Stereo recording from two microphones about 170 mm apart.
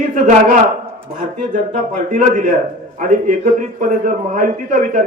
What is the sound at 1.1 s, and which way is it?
A man's voice, 50° right (ahead or behind).